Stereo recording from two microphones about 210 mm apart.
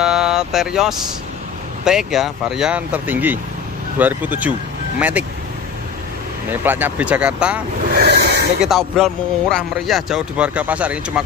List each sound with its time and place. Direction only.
0.0 s vehicle: 5° right (ahead or behind)
1.9 s speech: centre (ahead or behind)
6.5 s speech: 10° right (ahead or behind)
7.9 s snake: 50° right (ahead or behind)
8.5 s speech: centre (ahead or behind)